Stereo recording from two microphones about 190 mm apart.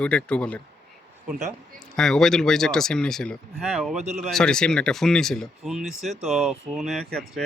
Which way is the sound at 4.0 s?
40° right (ahead or behind).